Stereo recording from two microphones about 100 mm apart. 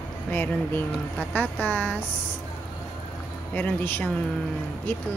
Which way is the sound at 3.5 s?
15° left (ahead or behind).